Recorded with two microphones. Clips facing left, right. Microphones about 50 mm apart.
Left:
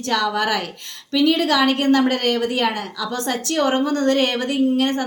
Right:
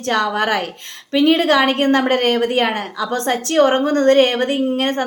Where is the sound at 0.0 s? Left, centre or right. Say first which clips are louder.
Right 2 dB; right.